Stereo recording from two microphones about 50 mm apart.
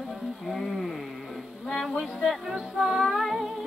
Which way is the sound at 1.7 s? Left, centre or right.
Centre.